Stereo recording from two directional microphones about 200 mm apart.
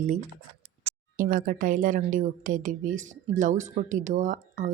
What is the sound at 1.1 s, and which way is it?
Speech, 45° right (ahead or behind).